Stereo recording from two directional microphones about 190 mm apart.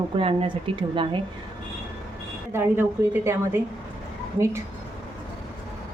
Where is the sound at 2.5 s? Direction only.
10° right (ahead or behind).